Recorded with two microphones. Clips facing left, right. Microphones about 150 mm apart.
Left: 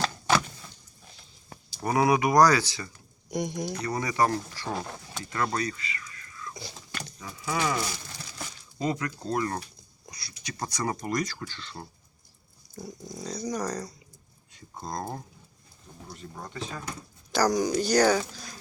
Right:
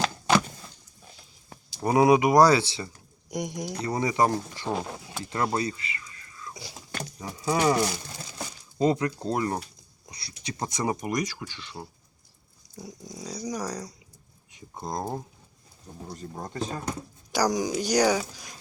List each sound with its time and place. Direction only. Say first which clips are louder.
1.8 s speech: right 4 dB; 20° right (ahead or behind)
4.7 s speech: right 3 dB; 5° right (ahead or behind)
5.5 s a sound: right 2 dB; 25° right (ahead or behind)
6.5 s a sound: even; 10° right (ahead or behind)
7.2 s speech: right 5 dB; 35° right (ahead or behind); by 11.9 s 10° right (ahead or behind)
13.1 s speech: left 1 dB; 10° right (ahead or behind)
16.0 s speech: right 4 dB; 40° right (ahead or behind)
17.3 s speech: left 1 dB; 15° right (ahead or behind)